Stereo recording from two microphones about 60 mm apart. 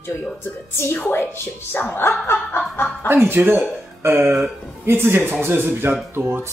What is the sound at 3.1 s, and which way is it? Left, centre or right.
A man's voice, right.